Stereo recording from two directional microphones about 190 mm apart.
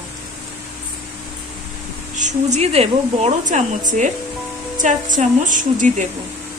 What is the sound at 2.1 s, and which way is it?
Speech, 40° right (ahead or behind).